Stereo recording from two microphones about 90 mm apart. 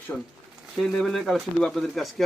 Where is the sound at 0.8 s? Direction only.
5° left (ahead or behind).